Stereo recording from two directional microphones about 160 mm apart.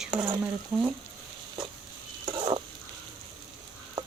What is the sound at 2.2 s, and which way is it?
Stir, 30° right (ahead or behind).